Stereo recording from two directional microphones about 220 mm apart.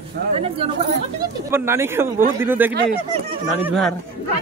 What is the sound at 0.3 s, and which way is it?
Speech, 25° right (ahead or behind).